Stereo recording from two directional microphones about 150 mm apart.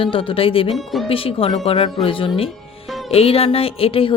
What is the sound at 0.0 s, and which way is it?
Speech, 35° left (ahead or behind).